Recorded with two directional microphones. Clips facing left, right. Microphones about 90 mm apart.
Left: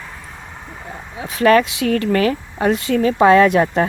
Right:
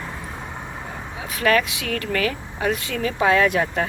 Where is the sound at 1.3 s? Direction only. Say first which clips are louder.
Left 7 dB; 35° left (ahead or behind).